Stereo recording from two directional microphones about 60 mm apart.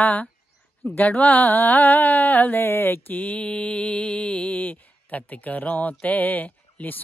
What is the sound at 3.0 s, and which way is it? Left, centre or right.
Mantra, left.